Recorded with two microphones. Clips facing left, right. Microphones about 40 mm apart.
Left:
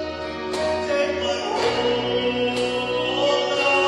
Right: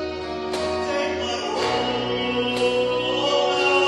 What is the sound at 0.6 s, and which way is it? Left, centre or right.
Music, centre.